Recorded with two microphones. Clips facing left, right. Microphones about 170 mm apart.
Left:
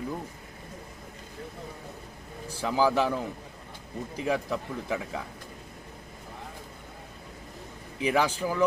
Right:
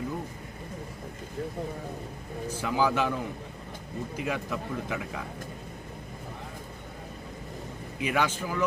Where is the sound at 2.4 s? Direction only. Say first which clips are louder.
Left 1 dB; 35° left (ahead or behind).